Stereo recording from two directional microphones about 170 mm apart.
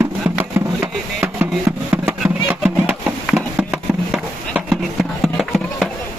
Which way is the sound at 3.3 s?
5° right (ahead or behind).